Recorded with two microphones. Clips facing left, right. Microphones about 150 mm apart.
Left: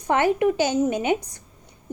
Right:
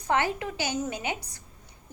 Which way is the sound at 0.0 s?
20° left (ahead or behind).